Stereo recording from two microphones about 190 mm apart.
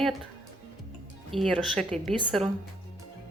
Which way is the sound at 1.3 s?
Centre (ahead or behind).